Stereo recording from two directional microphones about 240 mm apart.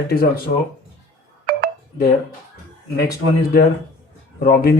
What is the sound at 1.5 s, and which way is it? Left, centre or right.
Telephone dialing, right.